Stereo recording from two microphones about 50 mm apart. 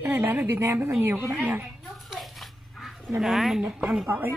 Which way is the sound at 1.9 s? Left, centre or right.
Centre.